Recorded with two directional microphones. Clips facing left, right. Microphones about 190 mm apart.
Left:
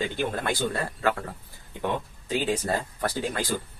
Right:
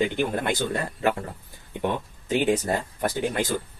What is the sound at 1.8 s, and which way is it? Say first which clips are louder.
Speech: right 2 dB; 20° right (ahead or behind).